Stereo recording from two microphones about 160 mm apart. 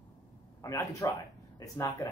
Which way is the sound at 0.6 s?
20° left (ahead or behind).